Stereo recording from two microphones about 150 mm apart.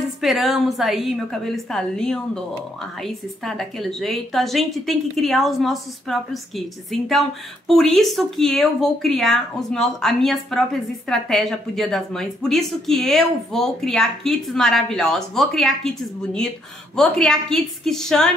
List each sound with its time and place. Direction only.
0.2 s a woman's voice: centre (ahead or behind)